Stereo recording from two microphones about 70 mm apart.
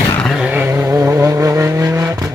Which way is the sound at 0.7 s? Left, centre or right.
Right.